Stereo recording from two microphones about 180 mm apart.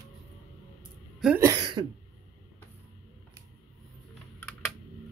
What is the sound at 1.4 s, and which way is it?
Throat clearing, 20° right (ahead or behind).